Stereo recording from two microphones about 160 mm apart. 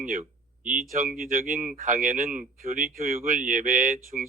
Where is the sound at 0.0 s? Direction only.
55° right (ahead or behind).